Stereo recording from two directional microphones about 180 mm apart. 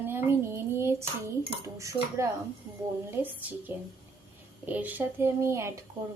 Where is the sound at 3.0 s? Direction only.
10° right (ahead or behind).